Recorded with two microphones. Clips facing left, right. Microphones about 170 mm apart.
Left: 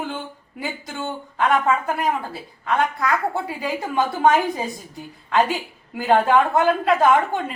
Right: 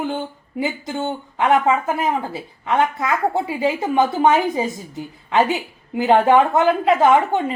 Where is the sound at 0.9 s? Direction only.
20° right (ahead or behind).